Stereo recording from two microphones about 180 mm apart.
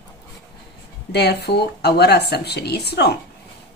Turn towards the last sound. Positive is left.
turn(degrees=65)  # may be behind; listen again after turning